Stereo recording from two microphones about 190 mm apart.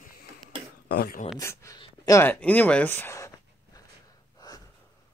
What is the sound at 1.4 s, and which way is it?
Speech, 15° left (ahead or behind).